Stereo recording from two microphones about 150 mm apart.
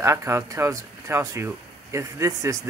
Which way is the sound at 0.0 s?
20° right (ahead or behind).